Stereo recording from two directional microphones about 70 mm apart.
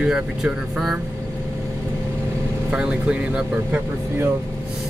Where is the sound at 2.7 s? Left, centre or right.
Centre.